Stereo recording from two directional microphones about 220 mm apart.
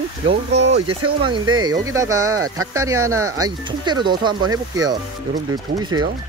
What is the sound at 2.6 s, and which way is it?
Speech, 75° right (ahead or behind).